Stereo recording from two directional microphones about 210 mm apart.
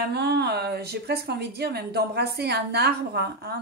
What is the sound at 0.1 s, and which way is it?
Speech, 50° right (ahead or behind).